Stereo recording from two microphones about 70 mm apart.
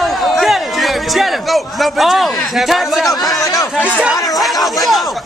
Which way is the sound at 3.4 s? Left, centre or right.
Left.